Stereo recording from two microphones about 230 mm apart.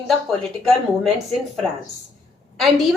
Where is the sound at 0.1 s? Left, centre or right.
Centre.